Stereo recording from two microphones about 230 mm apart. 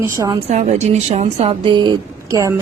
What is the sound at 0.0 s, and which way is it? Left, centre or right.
A woman's voice, centre.